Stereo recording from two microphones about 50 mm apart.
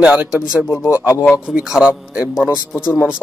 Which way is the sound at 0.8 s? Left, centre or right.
Left.